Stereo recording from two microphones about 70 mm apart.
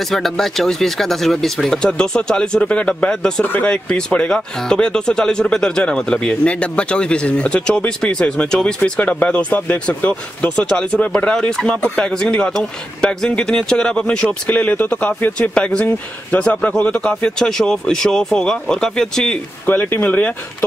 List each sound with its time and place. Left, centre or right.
0.1 s speech: centre
3.4 s speech: left
3.7 s speech: centre
19.6 s speech: left